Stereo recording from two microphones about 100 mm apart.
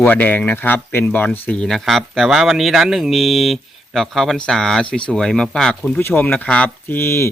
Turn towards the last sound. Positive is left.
turn(degrees=25)  # may be behind; listen again after turning